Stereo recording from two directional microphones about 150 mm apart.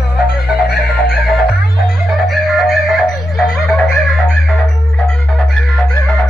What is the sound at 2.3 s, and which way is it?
Music, centre (ahead or behind).